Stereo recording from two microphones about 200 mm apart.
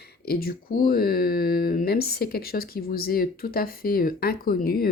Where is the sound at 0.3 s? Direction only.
50° left (ahead or behind).